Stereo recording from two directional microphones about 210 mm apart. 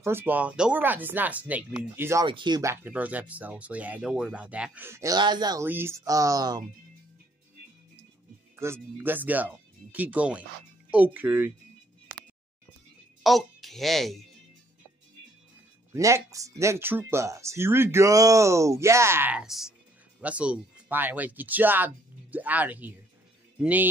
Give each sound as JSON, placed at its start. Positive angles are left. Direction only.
{"t": 0.0, "sound": "speech", "side_deg": -10}
{"t": 2.2, "sound": "speech", "side_deg": -20}
{"t": 8.5, "sound": "speech", "side_deg": -10}
{"t": 13.2, "sound": "speech", "side_deg": 0}
{"t": 15.9, "sound": "speech", "side_deg": -15}